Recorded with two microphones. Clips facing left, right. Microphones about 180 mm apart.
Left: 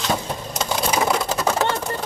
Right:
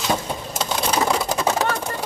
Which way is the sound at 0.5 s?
Centre (ahead or behind).